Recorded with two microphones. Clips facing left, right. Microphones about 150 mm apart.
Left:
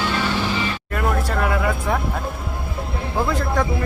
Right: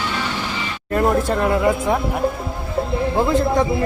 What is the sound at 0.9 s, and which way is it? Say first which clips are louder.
Speech: right 7 dB; 30° right (ahead or behind).